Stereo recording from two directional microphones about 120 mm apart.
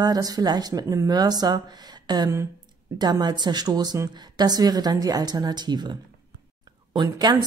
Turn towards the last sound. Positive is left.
turn(degrees=-35)  # may be behind; listen again after turning